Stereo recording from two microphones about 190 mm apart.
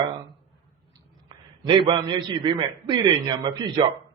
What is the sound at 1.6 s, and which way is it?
A man's voice, 25° right (ahead or behind).